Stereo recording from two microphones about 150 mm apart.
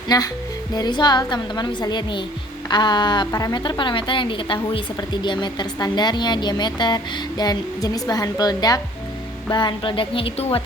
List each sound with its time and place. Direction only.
0.1 s a woman's voice: 25° left (ahead or behind); by 10.6 s 40° left (ahead or behind)